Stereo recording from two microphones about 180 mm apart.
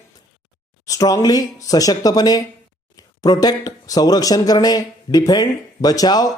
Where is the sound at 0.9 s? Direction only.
20° left (ahead or behind).